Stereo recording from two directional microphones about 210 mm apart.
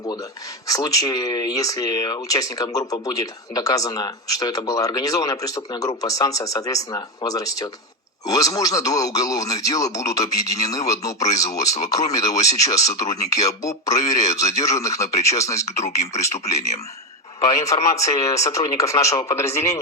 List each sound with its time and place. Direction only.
0.7 s speech: 15° left (ahead or behind)
15.8 s speech: 35° left (ahead or behind)
17.4 s speech: 15° left (ahead or behind)